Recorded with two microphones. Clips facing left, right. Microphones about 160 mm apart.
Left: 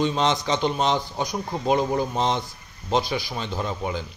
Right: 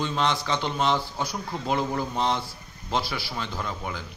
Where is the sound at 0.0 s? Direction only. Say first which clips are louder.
Left 4 dB; 20° left (ahead or behind).